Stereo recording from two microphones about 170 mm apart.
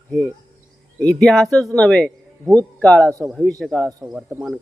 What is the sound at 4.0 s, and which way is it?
Speech, 5° right (ahead or behind).